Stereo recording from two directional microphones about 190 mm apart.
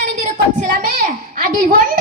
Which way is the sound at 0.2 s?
45° right (ahead or behind).